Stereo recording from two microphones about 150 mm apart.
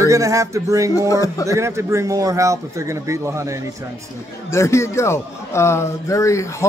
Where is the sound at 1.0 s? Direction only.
20° left (ahead or behind).